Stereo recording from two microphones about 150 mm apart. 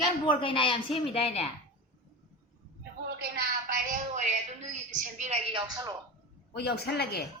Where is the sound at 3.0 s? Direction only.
90° right.